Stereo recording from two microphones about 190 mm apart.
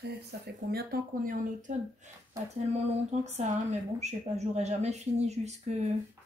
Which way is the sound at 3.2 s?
35° right (ahead or behind).